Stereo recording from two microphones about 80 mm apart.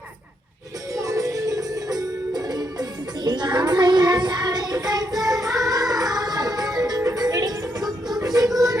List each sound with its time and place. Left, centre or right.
0.9 s music: right